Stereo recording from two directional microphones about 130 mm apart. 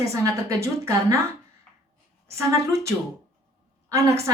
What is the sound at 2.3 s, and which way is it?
Speech, 20° right (ahead or behind).